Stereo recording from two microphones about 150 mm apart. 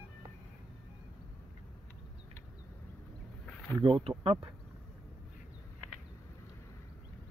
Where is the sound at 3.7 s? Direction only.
35° right (ahead or behind).